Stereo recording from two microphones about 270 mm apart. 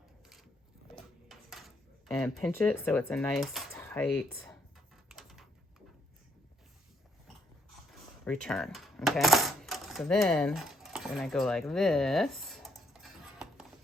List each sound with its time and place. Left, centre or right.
1.3 s cutlery: centre
3.1 s speech: centre
5.0 s a sound: centre
8.2 s coin: centre